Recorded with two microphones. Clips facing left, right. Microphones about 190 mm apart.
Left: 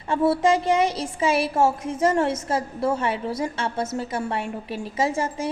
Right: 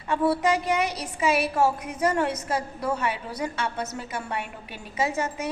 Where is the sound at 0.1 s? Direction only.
25° left (ahead or behind).